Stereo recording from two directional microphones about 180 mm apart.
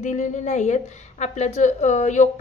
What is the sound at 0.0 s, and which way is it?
A woman's voice, 45° left (ahead or behind).